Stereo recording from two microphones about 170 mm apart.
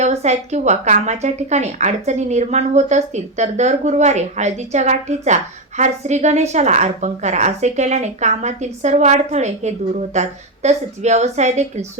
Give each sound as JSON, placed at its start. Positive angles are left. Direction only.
{"t": 0.0, "sound": "a woman's voice", "side_deg": -40}